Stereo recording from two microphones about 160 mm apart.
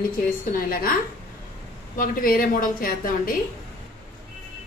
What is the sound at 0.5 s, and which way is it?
Speech, 65° left (ahead or behind).